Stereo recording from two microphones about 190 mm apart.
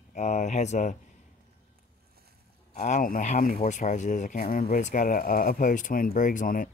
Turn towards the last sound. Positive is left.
turn(degrees=45)  # may be behind; listen again after turning